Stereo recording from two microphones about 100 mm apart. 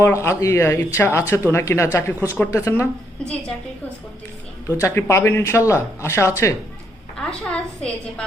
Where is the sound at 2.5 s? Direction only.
25° left (ahead or behind).